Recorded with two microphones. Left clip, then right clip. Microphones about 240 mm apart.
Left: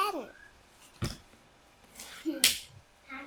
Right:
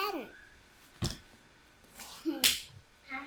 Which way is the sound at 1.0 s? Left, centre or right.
Left.